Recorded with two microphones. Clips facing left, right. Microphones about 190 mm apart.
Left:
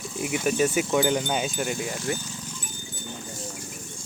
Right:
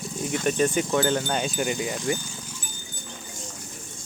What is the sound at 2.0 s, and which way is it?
Livestock, 10° right (ahead or behind).